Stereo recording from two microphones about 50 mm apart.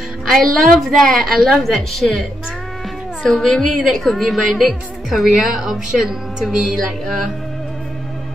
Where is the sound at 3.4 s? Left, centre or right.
Centre.